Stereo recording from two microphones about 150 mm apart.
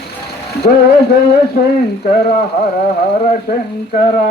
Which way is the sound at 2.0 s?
75° left (ahead or behind).